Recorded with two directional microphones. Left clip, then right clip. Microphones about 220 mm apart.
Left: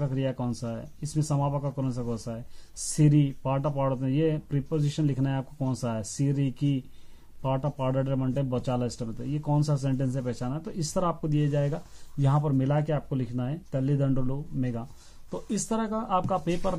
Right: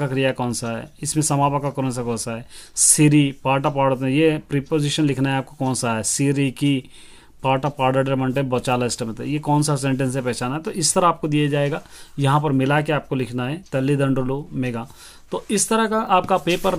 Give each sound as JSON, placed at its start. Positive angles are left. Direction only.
{"t": 0.0, "sound": "speech", "side_deg": -25}